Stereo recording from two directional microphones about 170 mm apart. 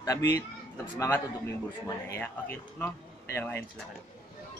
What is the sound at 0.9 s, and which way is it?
Speech, 15° left (ahead or behind).